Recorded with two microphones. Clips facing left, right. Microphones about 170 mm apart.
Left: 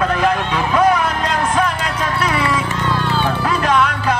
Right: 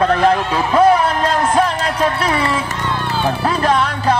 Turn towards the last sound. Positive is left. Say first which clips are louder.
# right 1 dB
turn(degrees=-35)  # may be behind; listen again after turning